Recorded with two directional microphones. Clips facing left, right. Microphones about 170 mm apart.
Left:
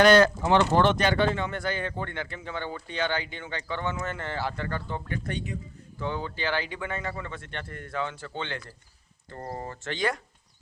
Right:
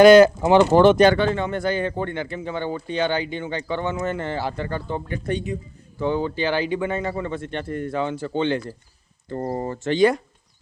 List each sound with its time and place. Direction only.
0.0 s speech: 10° right (ahead or behind)
1.4 s speech: 25° right (ahead or behind)